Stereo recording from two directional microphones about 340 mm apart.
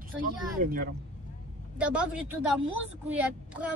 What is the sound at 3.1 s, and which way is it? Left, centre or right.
Speech, centre.